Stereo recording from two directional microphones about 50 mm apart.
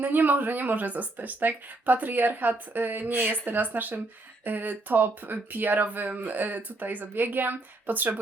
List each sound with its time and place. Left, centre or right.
0.0 s speech: right